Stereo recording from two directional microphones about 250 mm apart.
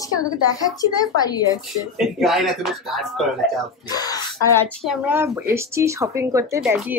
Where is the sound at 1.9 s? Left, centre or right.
Centre.